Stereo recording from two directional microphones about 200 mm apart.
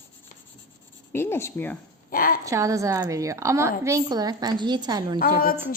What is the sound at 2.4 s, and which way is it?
A woman's voice, 15° right (ahead or behind).